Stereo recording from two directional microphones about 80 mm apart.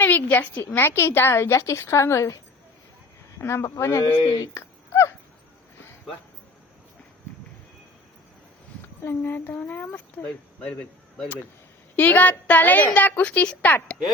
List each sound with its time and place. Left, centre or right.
0.0 s a woman's voice: left
3.3 s a woman's voice: left
4.5 s a sound: left
9.0 s a woman's voice: left
11.9 s a woman's voice: left